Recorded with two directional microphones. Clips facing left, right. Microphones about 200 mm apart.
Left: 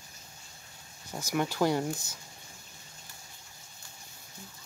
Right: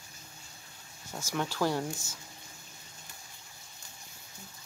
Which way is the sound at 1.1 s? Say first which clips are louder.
Left 3 dB; 10° left (ahead or behind).